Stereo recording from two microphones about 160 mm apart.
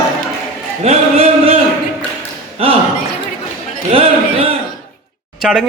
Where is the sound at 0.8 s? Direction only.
40° right (ahead or behind).